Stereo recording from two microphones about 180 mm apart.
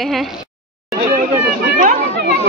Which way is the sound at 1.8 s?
45° right (ahead or behind).